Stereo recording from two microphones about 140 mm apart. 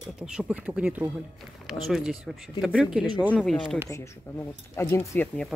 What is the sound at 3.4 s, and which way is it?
Speech, 5° left (ahead or behind).